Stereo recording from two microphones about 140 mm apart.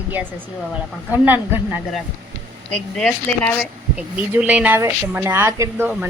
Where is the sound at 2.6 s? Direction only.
5° left (ahead or behind).